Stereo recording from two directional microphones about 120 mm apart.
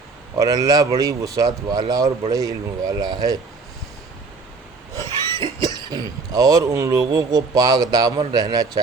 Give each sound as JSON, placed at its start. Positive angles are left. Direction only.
{"t": 0.3, "sound": "speech", "side_deg": -30}
{"t": 5.4, "sound": "speech", "side_deg": -35}